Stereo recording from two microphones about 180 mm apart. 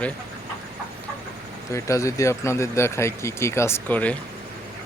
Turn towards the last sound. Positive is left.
turn(degrees=10)  # may be behind; listen again after turning